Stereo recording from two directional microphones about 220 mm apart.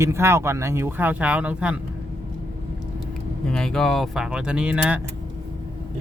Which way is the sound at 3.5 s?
5° left (ahead or behind).